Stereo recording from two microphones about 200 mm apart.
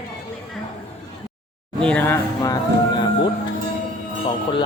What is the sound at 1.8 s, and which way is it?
Speech, 5° left (ahead or behind).